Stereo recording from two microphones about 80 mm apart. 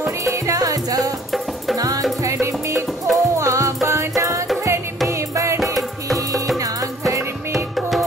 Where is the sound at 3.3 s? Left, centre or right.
Right.